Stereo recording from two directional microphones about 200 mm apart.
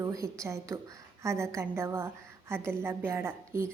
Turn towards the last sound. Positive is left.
turn(degrees=-10)  # may be behind; listen again after turning